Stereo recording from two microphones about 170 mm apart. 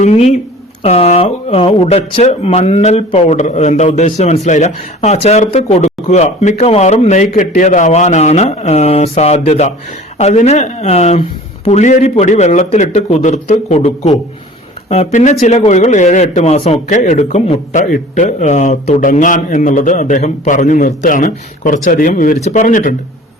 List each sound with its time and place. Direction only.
0.0 s a man's voice: 40° left (ahead or behind)